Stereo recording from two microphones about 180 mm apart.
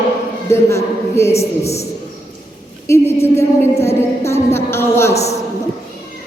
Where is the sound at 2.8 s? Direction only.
15° left (ahead or behind).